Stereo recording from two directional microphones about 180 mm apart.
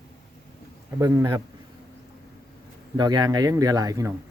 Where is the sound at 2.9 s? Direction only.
25° right (ahead or behind).